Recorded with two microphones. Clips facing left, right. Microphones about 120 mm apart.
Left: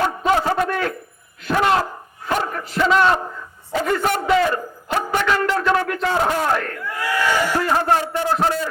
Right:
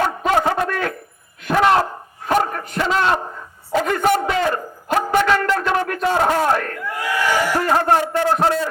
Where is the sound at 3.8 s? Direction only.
50° right (ahead or behind).